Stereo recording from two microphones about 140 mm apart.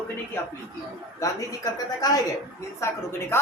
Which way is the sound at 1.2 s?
25° left (ahead or behind).